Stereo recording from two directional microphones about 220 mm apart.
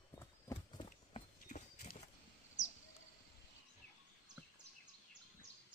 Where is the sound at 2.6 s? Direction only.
55° left (ahead or behind).